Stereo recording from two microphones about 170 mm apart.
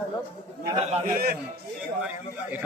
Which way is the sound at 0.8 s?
40° right (ahead or behind).